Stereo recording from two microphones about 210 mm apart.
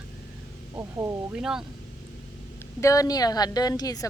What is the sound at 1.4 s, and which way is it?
Speech, 5° right (ahead or behind).